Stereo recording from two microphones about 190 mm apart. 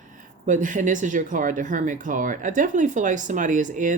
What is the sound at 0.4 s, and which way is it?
Speech, 40° right (ahead or behind).